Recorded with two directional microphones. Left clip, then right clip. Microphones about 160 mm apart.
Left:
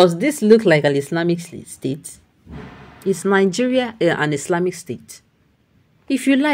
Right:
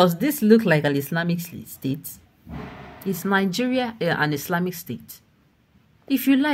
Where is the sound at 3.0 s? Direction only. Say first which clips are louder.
Left 7 dB; 25° left (ahead or behind).